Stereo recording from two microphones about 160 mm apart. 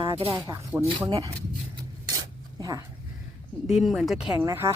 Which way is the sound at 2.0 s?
20° right (ahead or behind).